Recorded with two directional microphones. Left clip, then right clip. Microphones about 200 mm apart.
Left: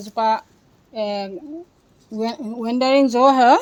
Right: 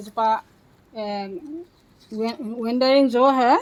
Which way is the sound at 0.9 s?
40° left (ahead or behind).